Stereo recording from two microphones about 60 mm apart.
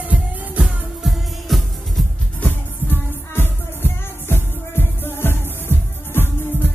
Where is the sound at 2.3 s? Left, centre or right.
Left.